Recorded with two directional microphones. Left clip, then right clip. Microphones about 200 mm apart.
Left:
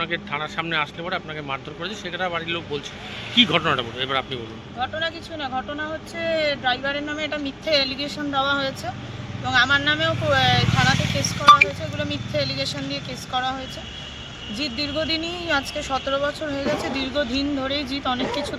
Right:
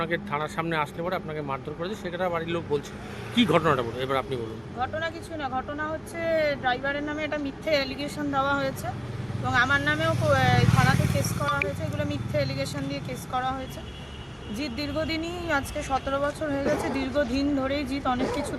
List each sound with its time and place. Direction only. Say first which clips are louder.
0.0 s speech: left 2 dB; 15° right (ahead or behind)
11.9 s speech: left 3 dB; 10° right (ahead or behind)
14.6 s speech: left 5 dB; 10° right (ahead or behind)